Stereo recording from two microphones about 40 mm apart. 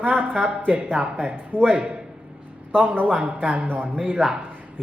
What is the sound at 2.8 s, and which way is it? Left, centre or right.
Speech, right.